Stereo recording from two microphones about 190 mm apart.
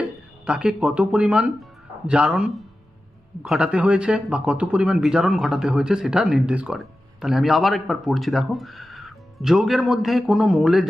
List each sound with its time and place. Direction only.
0.4 s speech: 5° right (ahead or behind)